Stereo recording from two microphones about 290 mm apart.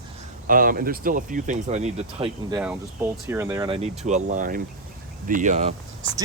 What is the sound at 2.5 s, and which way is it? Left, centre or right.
Speech, centre.